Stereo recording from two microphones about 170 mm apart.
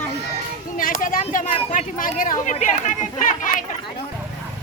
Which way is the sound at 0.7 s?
55° left (ahead or behind).